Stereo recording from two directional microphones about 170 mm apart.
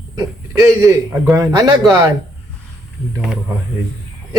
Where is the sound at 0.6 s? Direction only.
15° right (ahead or behind).